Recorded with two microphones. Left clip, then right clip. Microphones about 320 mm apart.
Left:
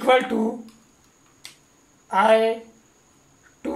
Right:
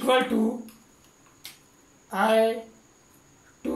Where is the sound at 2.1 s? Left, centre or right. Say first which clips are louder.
Left 6 dB; left.